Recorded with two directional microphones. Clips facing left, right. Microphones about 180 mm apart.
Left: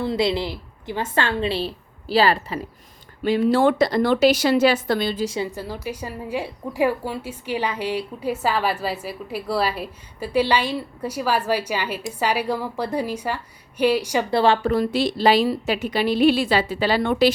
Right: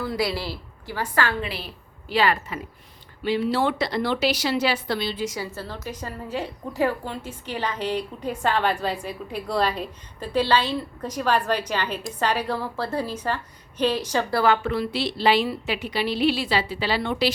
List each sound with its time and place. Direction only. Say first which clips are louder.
0.0 s a woman's voice: left 4 dB; 25° left (ahead or behind)
3.2 s a woman's voice: left 5 dB; 45° left (ahead or behind)
5.2 s a woman's voice: left 4 dB; 30° left (ahead or behind)
5.5 s a woman's voice: left 4 dB; 10° left (ahead or behind)
14.3 s a woman's voice: left 4 dB; 30° left (ahead or behind); by 17.3 s 50° left (ahead or behind)